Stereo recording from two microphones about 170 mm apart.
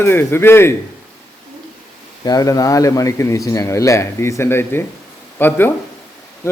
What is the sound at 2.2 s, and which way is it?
Speech, 20° left (ahead or behind).